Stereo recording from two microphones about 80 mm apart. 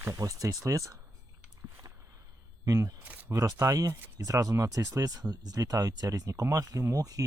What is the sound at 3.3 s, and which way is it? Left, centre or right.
Speech, right.